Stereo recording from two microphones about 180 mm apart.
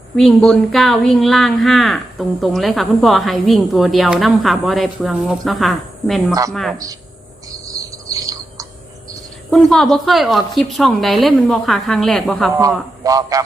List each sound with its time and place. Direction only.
0.2 s speech: centre (ahead or behind)
7.8 s bird: 20° right (ahead or behind)
9.5 s speech: centre (ahead or behind)
13.0 s a man's voice: 20° right (ahead or behind)